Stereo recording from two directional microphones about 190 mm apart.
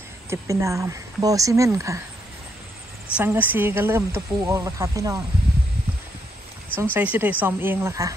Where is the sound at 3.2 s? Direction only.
10° right (ahead or behind).